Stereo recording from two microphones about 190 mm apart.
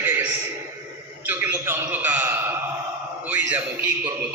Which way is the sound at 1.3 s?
10° right (ahead or behind).